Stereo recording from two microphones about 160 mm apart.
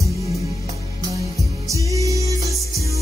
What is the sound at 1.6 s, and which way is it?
Music, 20° right (ahead or behind).